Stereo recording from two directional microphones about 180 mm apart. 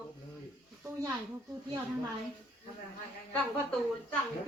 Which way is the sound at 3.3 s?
5° left (ahead or behind).